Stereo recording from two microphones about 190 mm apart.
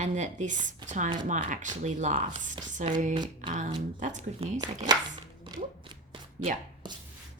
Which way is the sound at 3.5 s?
40° right (ahead or behind).